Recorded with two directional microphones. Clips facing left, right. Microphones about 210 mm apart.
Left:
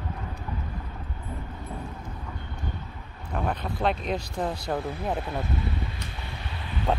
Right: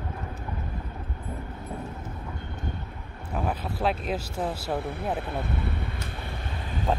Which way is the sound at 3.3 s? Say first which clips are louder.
Even; 5° right (ahead or behind).